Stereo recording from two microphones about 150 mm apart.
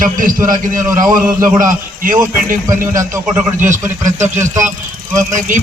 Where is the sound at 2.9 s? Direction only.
20° right (ahead or behind).